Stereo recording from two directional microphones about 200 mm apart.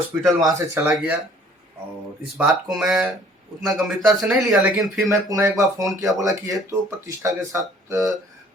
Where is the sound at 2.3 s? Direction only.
Centre (ahead or behind).